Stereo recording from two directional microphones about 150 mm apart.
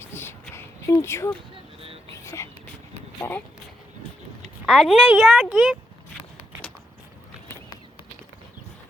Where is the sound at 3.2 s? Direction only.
20° left (ahead or behind).